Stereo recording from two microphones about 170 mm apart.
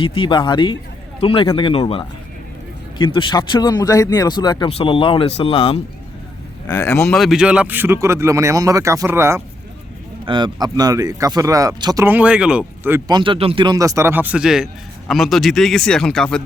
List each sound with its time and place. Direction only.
0.0 s a man's voice: 30° left (ahead or behind)
6.7 s speech: 20° left (ahead or behind)
7.1 s speech: centre (ahead or behind)
10.2 s speech: 25° right (ahead or behind)
12.0 s speech: 10° right (ahead or behind)
13.1 s speech: 25° right (ahead or behind); by 16.4 s 5° left (ahead or behind)